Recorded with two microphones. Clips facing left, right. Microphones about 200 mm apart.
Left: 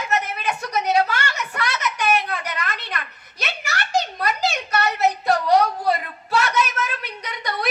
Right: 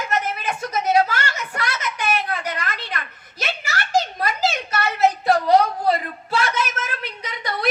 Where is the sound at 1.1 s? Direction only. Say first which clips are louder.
Even; 50° right (ahead or behind).